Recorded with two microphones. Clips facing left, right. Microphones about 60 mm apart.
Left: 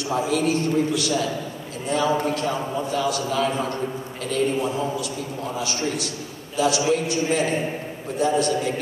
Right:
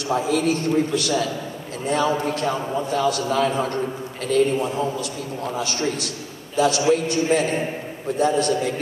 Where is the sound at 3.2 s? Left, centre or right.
Right.